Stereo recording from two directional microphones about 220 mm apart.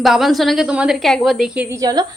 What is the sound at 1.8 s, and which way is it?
Speech, 20° right (ahead or behind).